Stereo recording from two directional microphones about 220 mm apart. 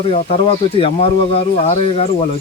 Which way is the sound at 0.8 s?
25° left (ahead or behind).